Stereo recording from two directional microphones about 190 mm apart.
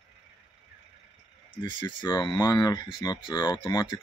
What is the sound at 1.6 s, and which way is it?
Speech, 25° left (ahead or behind).